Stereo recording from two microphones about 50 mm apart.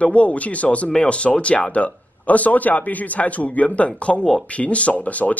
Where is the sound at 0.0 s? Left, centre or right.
Left.